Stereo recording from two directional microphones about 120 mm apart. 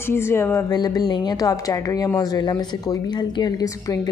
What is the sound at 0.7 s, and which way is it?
A woman's voice, 35° left (ahead or behind).